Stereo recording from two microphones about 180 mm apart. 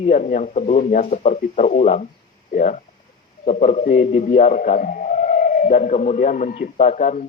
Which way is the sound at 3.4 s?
40° left (ahead or behind).